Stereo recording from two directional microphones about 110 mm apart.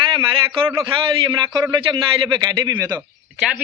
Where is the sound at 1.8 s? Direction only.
50° right (ahead or behind); by 3.0 s 30° right (ahead or behind).